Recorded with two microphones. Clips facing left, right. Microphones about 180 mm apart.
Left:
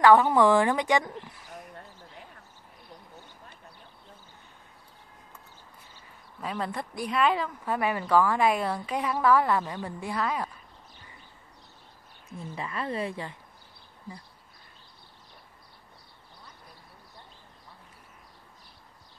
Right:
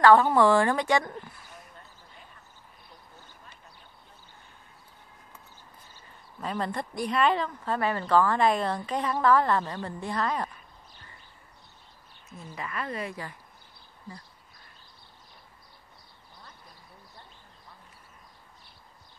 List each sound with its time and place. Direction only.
0.0 s speech: 15° left (ahead or behind)
6.4 s speech: 5° left (ahead or behind)
12.5 s speech: 25° left (ahead or behind)